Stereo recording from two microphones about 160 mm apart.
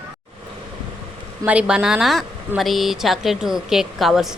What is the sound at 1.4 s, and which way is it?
A woman's voice, 10° right (ahead or behind).